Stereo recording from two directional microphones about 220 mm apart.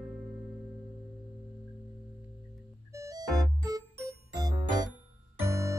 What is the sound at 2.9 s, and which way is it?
Music, 15° right (ahead or behind).